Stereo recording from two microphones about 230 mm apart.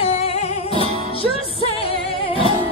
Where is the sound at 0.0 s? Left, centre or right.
Left.